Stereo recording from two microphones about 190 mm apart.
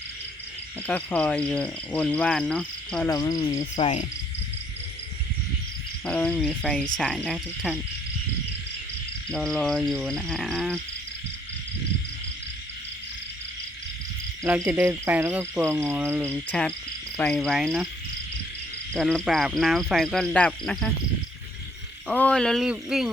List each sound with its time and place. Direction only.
0.9 s cricket: 10° left (ahead or behind)
3.1 s cricket: 20° left (ahead or behind)
3.6 s cricket: 40° left (ahead or behind)
6.1 s speech: 5° left (ahead or behind)
9.3 s speech: centre (ahead or behind)
14.4 s cricket: 10° right (ahead or behind)
16.2 s cricket: 5° left (ahead or behind)
17.2 s speech: 5° left (ahead or behind)
18.9 s speech: 5° left (ahead or behind)
22.0 s speech: 5° left (ahead or behind)